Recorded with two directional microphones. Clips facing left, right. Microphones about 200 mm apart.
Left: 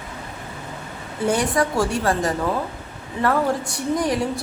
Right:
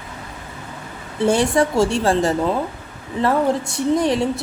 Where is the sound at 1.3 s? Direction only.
25° right (ahead or behind).